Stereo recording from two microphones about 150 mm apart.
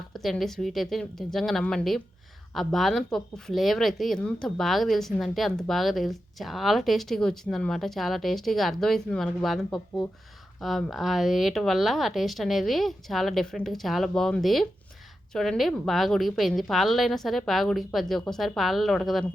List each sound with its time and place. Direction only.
0.1 s speech: centre (ahead or behind)
10.6 s speech: centre (ahead or behind)